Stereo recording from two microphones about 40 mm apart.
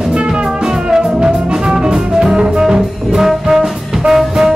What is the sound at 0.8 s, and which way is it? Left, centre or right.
Music, centre.